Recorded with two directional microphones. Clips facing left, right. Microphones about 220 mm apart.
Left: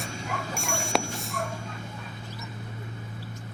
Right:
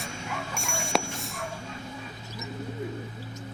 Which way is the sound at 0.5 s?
Centre (ahead or behind).